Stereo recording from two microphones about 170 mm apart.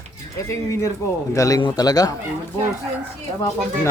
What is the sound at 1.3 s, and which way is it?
Speech, 20° left (ahead or behind).